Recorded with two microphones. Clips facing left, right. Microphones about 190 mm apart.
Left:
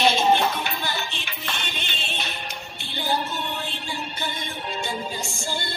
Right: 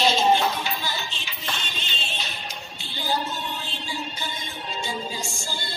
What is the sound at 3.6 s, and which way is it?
Music, 60° left (ahead or behind).